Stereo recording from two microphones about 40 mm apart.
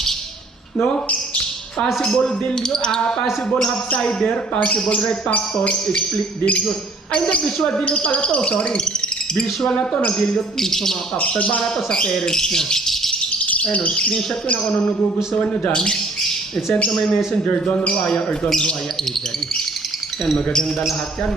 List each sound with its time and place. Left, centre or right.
2.0 s speech: centre; by 4.9 s left
7.1 s speech: left
7.4 s speech: centre
7.8 s speech: left
9.3 s speech: centre
11.2 s speech: left
11.6 s speech: left
13.7 s speech: left
15.7 s speech: left
20.2 s speech: centre